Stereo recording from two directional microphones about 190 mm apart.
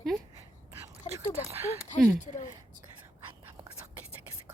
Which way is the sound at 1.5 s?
15° right (ahead or behind).